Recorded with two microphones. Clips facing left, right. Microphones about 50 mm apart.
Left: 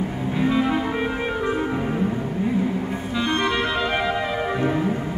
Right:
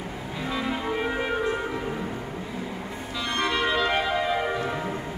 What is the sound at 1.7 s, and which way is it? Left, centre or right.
Music, left.